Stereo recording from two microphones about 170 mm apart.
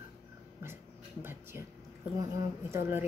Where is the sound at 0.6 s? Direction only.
15° right (ahead or behind).